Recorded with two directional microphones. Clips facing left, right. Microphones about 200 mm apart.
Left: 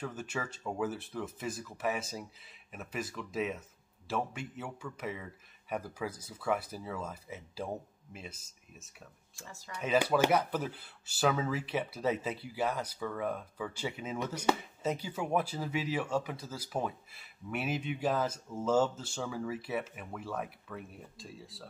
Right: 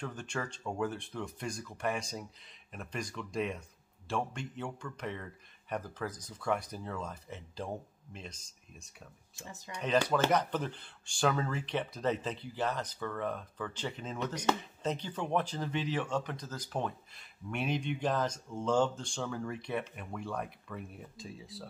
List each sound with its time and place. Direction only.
0.0 s speech: 5° left (ahead or behind)
9.3 s speech: 20° right (ahead or behind)
9.8 s speech: 5° left (ahead or behind)